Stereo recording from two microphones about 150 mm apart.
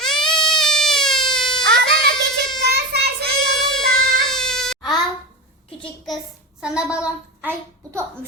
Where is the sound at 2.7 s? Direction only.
90° right.